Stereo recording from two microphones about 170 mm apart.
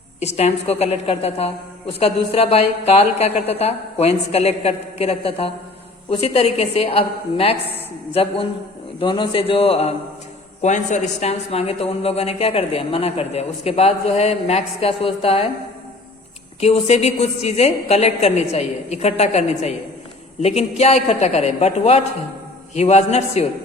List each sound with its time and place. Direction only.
0.2 s a woman's voice: 40° left (ahead or behind)
16.6 s a woman's voice: 40° left (ahead or behind)